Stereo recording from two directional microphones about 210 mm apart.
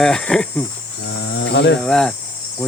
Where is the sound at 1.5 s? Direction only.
55° left (ahead or behind).